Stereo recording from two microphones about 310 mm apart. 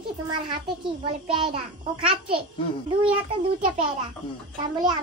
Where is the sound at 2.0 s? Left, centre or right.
Centre.